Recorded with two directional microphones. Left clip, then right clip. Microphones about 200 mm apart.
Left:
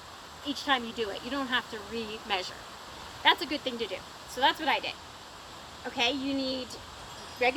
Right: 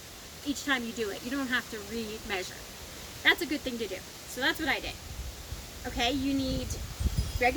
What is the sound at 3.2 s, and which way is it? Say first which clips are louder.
Speech: left 1 dB; 15° right (ahead or behind).